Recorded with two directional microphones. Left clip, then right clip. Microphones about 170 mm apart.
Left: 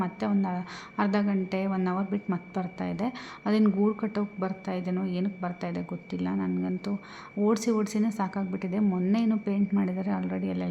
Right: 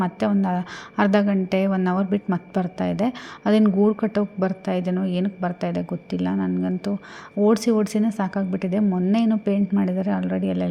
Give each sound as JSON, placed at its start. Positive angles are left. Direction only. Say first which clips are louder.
{"t": 0.0, "sound": "a woman's voice", "louder": "right 7 dB", "side_deg": -30}